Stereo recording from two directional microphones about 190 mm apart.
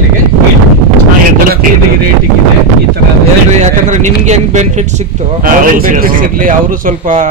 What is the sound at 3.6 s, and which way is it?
Speech, 40° right (ahead or behind).